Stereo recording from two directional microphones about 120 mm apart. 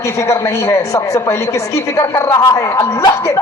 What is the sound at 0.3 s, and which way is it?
Speech, 25° left (ahead or behind).